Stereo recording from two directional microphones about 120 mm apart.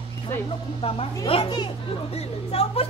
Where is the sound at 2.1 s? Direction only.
55° left (ahead or behind).